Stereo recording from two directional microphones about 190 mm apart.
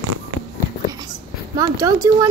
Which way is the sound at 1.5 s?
20° right (ahead or behind).